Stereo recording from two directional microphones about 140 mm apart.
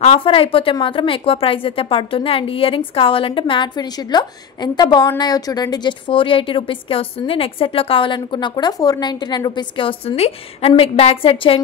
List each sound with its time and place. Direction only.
0.0 s a woman's voice: 40° left (ahead or behind)